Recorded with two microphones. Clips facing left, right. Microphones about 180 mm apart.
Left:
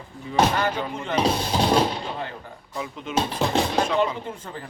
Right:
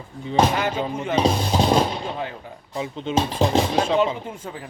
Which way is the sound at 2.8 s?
30° right (ahead or behind).